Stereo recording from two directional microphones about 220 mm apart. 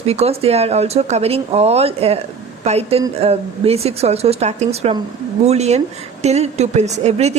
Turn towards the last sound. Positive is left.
turn(degrees=-30)  # may be behind; listen again after turning